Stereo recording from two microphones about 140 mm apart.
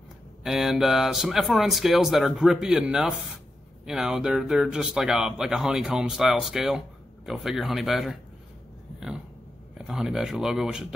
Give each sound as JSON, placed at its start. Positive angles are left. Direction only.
{"t": 0.4, "sound": "speech", "side_deg": -5}
{"t": 9.8, "sound": "speech", "side_deg": -5}